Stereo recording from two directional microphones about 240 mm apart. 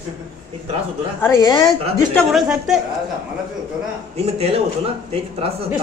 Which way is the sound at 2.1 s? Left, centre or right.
Centre.